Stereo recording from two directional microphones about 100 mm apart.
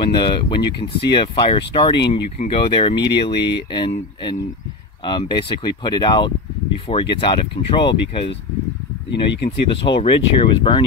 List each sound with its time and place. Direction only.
0.0 s speech: 50° left (ahead or behind)
2.3 s speech: 85° left
2.6 s speech: 55° left (ahead or behind)
9.8 s speech: 55° left (ahead or behind)